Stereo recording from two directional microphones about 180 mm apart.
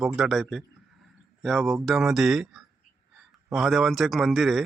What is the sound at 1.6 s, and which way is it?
Speech, 10° right (ahead or behind).